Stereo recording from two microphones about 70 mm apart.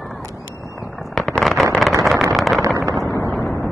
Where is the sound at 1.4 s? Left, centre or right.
Centre.